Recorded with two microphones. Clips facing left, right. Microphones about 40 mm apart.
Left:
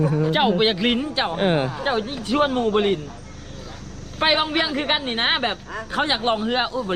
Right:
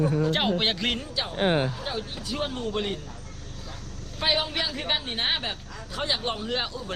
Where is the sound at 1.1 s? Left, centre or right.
Left.